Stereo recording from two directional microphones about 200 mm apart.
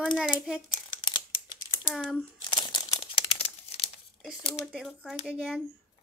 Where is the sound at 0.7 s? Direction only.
25° left (ahead or behind).